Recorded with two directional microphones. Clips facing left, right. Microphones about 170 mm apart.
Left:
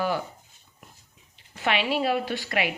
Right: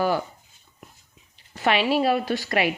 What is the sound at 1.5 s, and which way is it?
A woman's voice, 40° right (ahead or behind).